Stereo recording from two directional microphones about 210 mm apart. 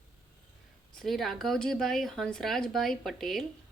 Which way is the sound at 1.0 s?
Centre (ahead or behind).